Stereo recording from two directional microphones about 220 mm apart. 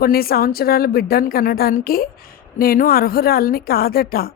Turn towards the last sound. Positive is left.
turn(degrees=40)  # may be behind; listen again after turning